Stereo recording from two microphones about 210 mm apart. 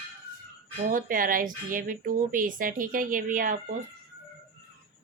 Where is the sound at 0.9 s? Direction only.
40° right (ahead or behind).